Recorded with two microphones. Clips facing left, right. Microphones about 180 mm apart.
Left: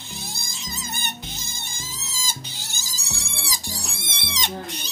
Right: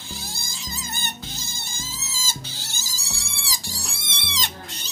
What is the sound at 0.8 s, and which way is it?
Music, 20° left (ahead or behind).